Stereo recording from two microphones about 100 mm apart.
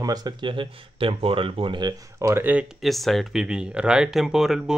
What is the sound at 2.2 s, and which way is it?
Speech, 30° right (ahead or behind).